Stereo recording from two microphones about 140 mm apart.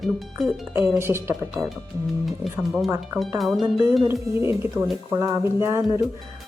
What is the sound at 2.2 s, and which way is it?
Speech, centre (ahead or behind).